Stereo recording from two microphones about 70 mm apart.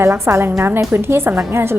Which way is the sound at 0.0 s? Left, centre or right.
Right.